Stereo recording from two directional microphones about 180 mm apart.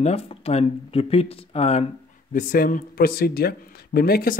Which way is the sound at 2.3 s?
50° left (ahead or behind).